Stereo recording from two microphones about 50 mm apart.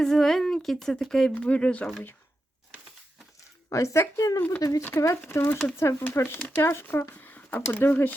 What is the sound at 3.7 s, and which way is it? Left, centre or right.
Speech, left.